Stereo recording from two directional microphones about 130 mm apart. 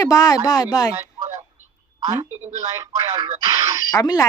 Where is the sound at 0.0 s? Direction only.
30° left (ahead or behind).